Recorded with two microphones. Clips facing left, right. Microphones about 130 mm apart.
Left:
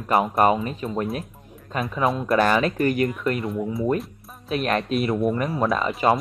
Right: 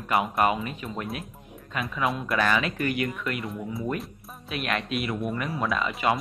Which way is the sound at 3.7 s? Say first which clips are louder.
Left 7 dB; 25° left (ahead or behind).